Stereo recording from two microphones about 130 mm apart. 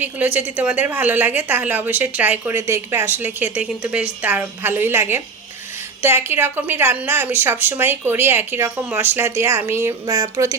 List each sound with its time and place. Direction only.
0.0 s a woman's voice: 15° right (ahead or behind)